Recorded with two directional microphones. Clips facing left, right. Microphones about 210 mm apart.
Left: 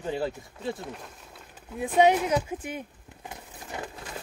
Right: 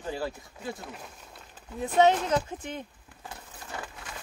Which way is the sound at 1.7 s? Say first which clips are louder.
Left 1 dB; 10° left (ahead or behind).